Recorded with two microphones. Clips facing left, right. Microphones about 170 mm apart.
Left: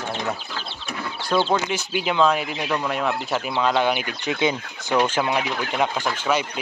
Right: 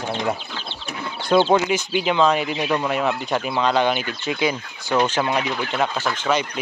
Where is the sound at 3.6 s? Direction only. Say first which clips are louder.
Even; 5° left (ahead or behind).